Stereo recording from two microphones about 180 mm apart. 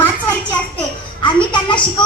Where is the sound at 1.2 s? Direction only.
25° left (ahead or behind).